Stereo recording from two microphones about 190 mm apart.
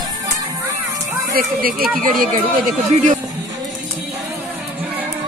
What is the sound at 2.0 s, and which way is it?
Speech, 45° right (ahead or behind).